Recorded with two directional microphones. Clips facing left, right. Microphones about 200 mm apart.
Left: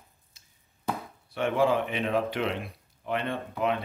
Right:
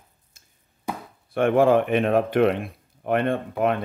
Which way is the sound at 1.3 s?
55° right (ahead or behind).